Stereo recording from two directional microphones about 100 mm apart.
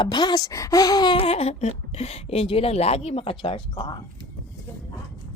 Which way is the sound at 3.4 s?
60° left (ahead or behind).